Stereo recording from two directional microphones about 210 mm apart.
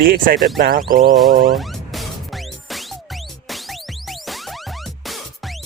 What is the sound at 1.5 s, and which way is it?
Music, centre (ahead or behind).